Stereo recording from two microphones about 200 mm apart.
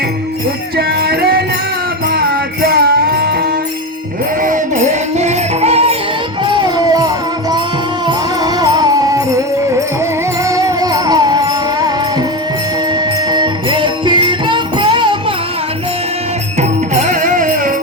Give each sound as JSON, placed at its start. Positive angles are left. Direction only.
{"t": 0.8, "sound": "music", "side_deg": -50}
{"t": 4.4, "sound": "music", "side_deg": -40}
{"t": 13.3, "sound": "music", "side_deg": -25}
{"t": 16.6, "sound": "music", "side_deg": -35}